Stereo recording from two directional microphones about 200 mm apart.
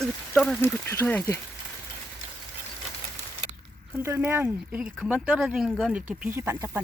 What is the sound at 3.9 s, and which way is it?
Speech, 10° right (ahead or behind).